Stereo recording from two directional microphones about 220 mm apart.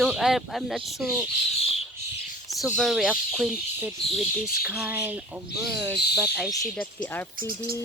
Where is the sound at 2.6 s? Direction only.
Centre (ahead or behind).